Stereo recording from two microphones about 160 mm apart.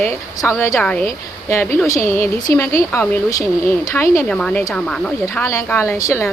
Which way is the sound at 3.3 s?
20° left (ahead or behind).